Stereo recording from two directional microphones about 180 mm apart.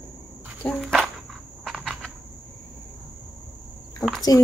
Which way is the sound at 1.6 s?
Centre (ahead or behind).